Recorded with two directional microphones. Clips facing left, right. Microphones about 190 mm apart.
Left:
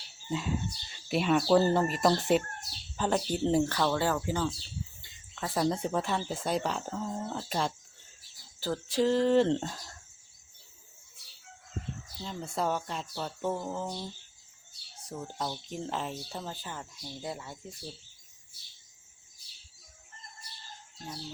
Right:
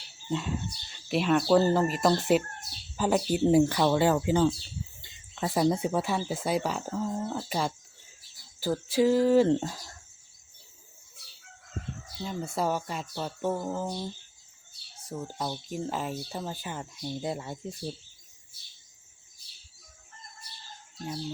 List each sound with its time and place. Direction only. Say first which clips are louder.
0.3 s speech: right 1 dB; centre (ahead or behind)
12.2 s speech: right 3 dB; 5° right (ahead or behind)
15.1 s speech: right 2 dB; 10° right (ahead or behind); by 17.7 s 25° right (ahead or behind)